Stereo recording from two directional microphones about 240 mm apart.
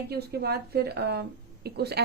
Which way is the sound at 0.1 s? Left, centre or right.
Right.